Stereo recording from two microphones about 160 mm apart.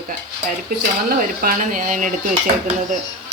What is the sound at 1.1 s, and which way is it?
Speech, 65° right (ahead or behind).